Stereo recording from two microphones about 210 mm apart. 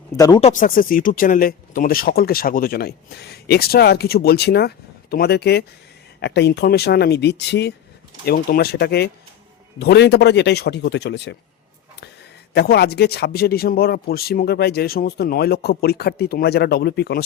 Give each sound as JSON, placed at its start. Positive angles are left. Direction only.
{"t": 0.2, "sound": "speech", "side_deg": 15}
{"t": 0.4, "sound": "speech", "side_deg": 40}
{"t": 12.5, "sound": "speech", "side_deg": 50}